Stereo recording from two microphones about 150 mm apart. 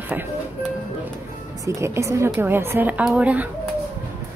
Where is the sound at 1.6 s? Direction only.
20° right (ahead or behind).